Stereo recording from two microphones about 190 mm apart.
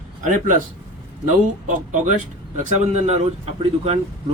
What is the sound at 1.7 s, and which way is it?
Speech, 40° right (ahead or behind).